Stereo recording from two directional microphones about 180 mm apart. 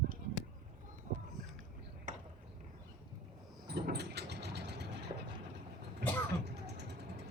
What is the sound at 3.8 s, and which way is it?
Vehicle, 65° right (ahead or behind).